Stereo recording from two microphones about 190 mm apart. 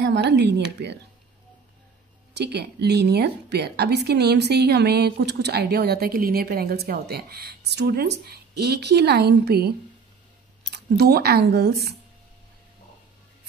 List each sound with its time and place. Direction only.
0.0 s a woman's voice: 65° right (ahead or behind)
2.3 s a woman's voice: 60° right (ahead or behind)
10.7 s speech: 55° right (ahead or behind)